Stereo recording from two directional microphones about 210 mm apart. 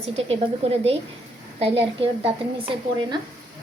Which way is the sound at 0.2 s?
30° right (ahead or behind).